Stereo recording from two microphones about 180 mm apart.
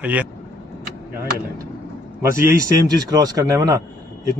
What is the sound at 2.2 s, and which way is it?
A man's voice, 15° right (ahead or behind).